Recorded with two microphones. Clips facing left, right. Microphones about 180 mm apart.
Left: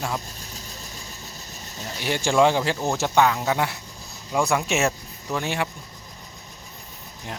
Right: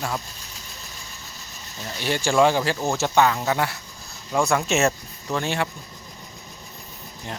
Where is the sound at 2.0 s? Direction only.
15° left (ahead or behind).